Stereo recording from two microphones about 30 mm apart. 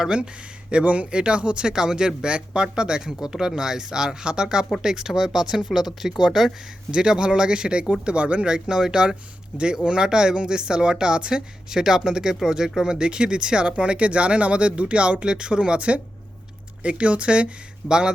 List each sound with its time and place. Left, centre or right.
0.9 s speech: right
1.7 s speech: right
2.2 s speech: right; by 6.5 s centre
6.9 s speech: right
8.0 s speech: right
8.4 s speech: right
11.7 s speech: centre; by 17.5 s right
17.8 s speech: right